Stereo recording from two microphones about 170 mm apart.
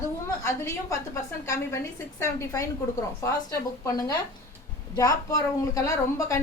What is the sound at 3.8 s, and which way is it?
A woman's voice, 20° left (ahead or behind).